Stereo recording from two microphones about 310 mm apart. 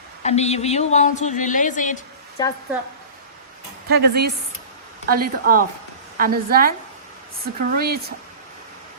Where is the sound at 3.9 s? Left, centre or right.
Right.